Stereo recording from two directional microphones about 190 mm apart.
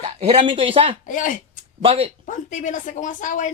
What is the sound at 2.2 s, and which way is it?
A woman's voice, 45° left (ahead or behind).